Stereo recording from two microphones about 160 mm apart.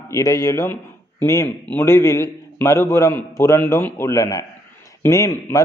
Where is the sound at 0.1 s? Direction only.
20° left (ahead or behind).